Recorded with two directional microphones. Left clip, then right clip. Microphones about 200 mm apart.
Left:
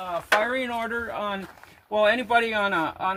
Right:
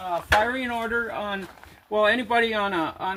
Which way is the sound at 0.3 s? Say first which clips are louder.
Right 1 dB; 15° left (ahead or behind).